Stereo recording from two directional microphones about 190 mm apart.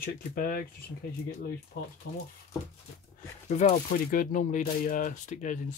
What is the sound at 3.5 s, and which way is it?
Speech, 45° left (ahead or behind).